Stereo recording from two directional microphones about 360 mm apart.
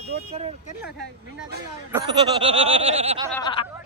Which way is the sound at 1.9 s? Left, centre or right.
Centre.